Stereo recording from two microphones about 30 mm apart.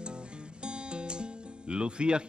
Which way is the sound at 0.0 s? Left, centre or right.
Right.